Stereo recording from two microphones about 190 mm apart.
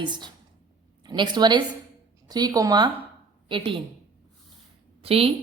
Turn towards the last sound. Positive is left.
turn(degrees=-30)  # may be behind; listen again after turning